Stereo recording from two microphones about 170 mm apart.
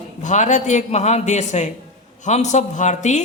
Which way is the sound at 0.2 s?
45° left (ahead or behind).